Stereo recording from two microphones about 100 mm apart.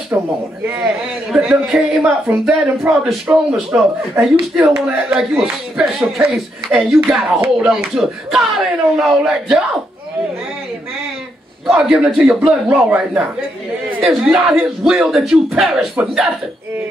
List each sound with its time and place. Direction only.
0.1 s speech: 20° right (ahead or behind)
1.7 s speech: 5° right (ahead or behind)
11.6 s speech: 5° right (ahead or behind)